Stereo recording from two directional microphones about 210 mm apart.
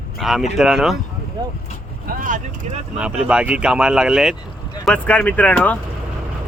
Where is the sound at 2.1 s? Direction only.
40° right (ahead or behind).